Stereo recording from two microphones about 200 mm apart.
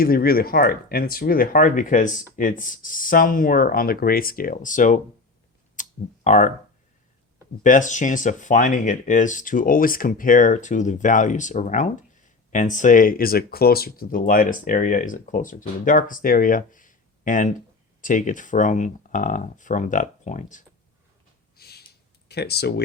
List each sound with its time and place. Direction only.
0.0 s speech: 45° left (ahead or behind)
5.7 s clicking: 40° left (ahead or behind)
7.6 s speech: 40° left (ahead or behind)
21.5 s a sound: 50° left (ahead or behind)
22.3 s speech: 55° left (ahead or behind)